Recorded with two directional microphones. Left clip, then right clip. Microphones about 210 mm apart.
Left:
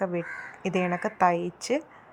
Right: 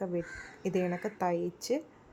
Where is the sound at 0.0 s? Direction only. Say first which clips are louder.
Left 6 dB; 15° left (ahead or behind).